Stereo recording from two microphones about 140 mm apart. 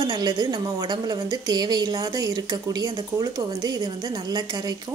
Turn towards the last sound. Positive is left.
turn(degrees=-30)  # may be behind; listen again after turning